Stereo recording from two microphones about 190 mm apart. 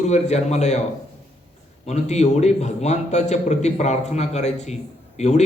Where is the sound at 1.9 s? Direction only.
35° left (ahead or behind).